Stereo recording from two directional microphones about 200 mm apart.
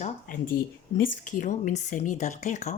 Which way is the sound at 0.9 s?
40° left (ahead or behind).